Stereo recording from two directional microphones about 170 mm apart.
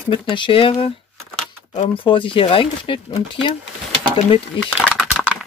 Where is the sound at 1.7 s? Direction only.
30° left (ahead or behind).